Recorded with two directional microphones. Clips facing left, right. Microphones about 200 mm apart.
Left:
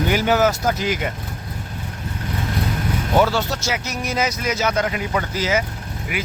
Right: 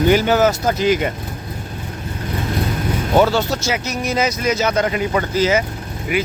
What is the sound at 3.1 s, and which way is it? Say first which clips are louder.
Speech: right 3 dB; 20° right (ahead or behind).